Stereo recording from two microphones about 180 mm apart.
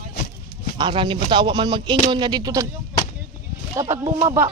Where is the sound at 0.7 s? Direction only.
30° right (ahead or behind).